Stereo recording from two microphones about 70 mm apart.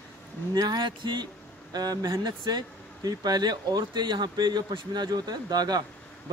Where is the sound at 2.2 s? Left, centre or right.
Right.